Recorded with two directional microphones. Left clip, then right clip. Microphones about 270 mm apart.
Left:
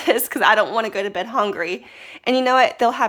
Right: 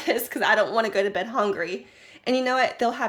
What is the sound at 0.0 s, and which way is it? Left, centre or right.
Speech, centre.